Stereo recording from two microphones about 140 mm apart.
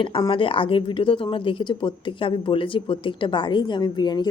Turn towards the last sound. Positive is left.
turn(degrees=30)  # may be behind; listen again after turning